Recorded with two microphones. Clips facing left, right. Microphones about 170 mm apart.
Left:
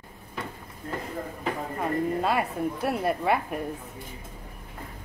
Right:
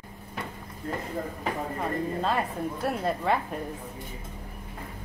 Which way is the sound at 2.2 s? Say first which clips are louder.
Left 2 dB; 10° left (ahead or behind).